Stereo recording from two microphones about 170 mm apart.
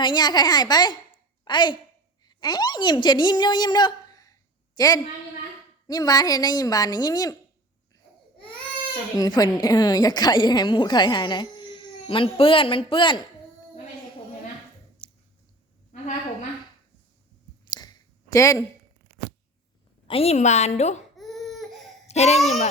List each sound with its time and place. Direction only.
0.0 s a woman's voice: 25° left (ahead or behind)
9.1 s a woman's voice: 20° left (ahead or behind)
15.0 s squish: 30° left (ahead or behind)
17.7 s a sound: 20° left (ahead or behind)
20.1 s a woman's voice: 35° left (ahead or behind)
21.2 s baby cry: centre (ahead or behind)
22.0 s babbling: 40° left (ahead or behind)
22.4 s a woman's voice: 40° left (ahead or behind)